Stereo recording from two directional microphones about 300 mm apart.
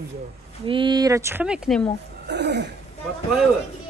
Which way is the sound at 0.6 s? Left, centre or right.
Centre.